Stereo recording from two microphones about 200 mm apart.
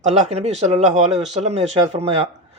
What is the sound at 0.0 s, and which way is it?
Speech, 35° right (ahead or behind).